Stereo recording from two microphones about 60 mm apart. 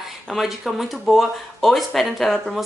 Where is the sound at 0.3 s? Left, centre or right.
Centre.